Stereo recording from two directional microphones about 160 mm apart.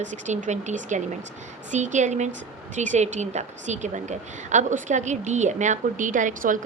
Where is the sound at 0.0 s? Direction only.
50° right (ahead or behind).